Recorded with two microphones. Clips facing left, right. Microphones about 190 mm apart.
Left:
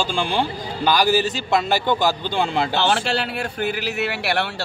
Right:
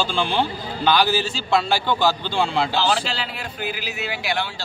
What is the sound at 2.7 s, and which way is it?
A man's voice, 60° left (ahead or behind).